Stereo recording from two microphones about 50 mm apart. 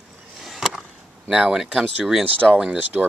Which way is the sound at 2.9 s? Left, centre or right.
Centre.